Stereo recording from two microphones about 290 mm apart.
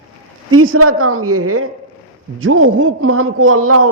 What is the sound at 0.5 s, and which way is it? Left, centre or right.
A man's voice, right.